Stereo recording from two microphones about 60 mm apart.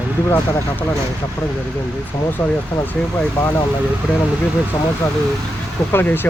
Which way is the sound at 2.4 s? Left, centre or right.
Left.